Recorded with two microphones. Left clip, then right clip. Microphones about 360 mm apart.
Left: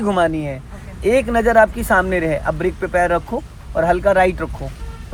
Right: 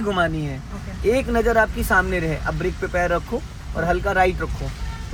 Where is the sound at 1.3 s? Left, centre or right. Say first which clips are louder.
Left 5 dB; centre.